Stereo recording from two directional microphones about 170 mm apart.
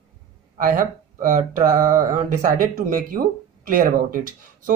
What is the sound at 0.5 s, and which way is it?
Speech, 50° right (ahead or behind).